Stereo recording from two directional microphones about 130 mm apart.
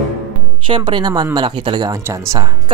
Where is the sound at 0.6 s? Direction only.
40° right (ahead or behind).